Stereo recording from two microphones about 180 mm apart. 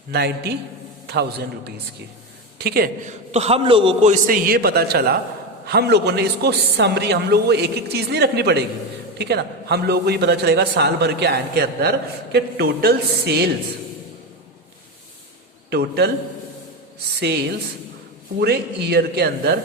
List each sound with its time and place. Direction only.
0.1 s a man's voice: 65° right (ahead or behind)
3.1 s a man's voice: 35° right (ahead or behind)
4.1 s a man's voice: 50° right (ahead or behind)
15.7 s a man's voice: 60° right (ahead or behind)
17.2 s a man's voice: 65° right (ahead or behind)